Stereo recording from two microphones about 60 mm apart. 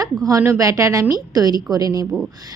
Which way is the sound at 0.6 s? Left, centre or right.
Right.